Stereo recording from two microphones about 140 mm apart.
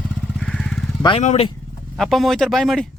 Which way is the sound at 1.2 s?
50° left (ahead or behind).